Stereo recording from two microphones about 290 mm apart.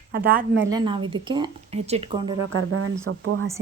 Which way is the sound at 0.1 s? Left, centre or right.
Right.